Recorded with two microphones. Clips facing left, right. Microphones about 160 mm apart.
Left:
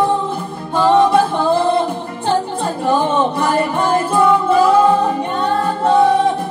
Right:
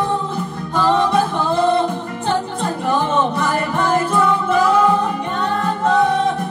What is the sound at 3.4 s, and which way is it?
Music, 30° left (ahead or behind).